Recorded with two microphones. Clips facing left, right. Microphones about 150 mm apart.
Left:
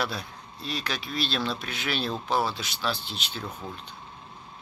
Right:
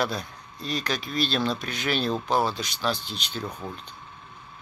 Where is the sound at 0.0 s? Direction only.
5° left (ahead or behind).